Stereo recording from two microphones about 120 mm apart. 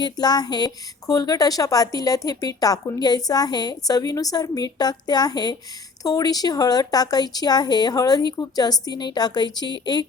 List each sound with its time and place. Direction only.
0.0 s speech: 35° left (ahead or behind)